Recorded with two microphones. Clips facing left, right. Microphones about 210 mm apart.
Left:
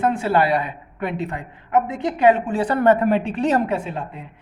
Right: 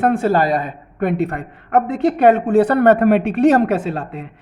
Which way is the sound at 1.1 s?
65° right (ahead or behind).